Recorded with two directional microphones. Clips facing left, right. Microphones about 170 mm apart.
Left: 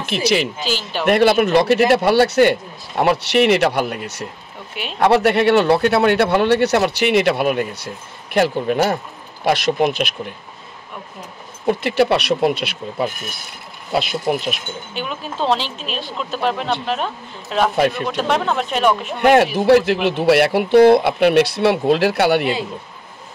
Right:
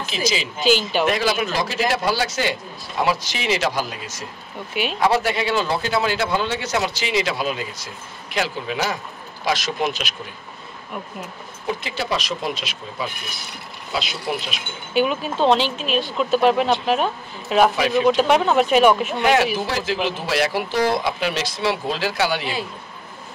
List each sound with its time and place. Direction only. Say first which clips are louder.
0.0 s speech: left 6 dB; 65° left (ahead or behind)
0.6 s speech: right 5 dB; centre (ahead or behind)
1.0 s speech: left 7 dB; 60° left (ahead or behind)
11.6 s speech: left 10 dB; 65° left (ahead or behind); by 14.6 s 50° left (ahead or behind)
15.0 s speech: right 6 dB; 5° right (ahead or behind)
19.2 s speech: left 7 dB; 55° left (ahead or behind)